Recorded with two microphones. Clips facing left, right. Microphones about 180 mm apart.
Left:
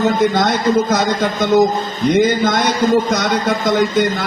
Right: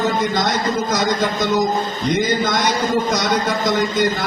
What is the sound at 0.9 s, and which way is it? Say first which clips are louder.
A man's voice: left 2 dB; 55° left (ahead or behind).